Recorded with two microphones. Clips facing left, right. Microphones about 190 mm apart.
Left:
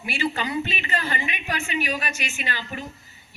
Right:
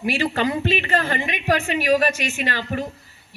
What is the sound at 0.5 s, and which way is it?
A woman's voice, 50° right (ahead or behind).